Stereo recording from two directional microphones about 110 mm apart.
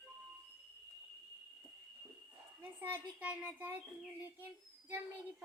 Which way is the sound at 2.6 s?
20° right (ahead or behind).